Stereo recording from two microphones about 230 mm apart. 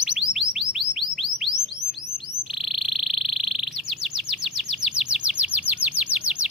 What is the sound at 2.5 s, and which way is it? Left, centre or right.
Insect, centre.